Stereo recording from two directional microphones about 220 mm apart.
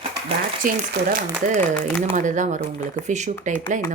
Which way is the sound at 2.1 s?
35° right (ahead or behind).